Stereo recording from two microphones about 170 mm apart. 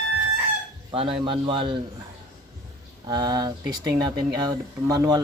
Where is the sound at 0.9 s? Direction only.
30° right (ahead or behind).